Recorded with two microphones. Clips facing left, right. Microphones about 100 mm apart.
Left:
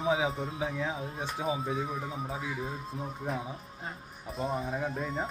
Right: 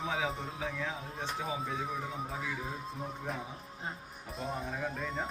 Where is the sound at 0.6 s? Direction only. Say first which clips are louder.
Left 5 dB; 15° left (ahead or behind).